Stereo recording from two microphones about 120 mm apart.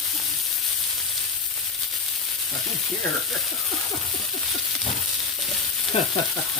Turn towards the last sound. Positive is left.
turn(degrees=50)  # may be behind; listen again after turning